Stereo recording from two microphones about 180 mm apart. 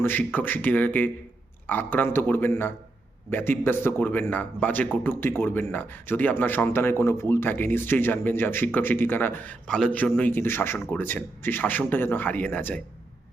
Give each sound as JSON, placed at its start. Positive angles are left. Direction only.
{"t": 0.0, "sound": "speech", "side_deg": 10}